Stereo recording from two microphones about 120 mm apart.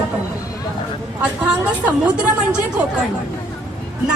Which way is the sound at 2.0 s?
10° right (ahead or behind).